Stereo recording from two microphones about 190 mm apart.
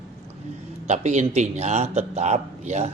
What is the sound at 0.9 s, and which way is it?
A man's voice, 35° right (ahead or behind).